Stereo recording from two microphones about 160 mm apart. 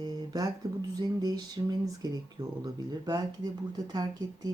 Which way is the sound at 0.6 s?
25° right (ahead or behind).